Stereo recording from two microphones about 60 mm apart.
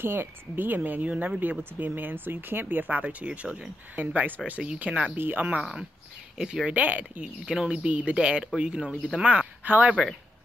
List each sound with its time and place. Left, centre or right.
0.0 s speech: right; by 4.0 s centre
4.0 s speech: right
5.1 s speech: right
5.6 s speech: centre
6.7 s speech: right
7.4 s speech: centre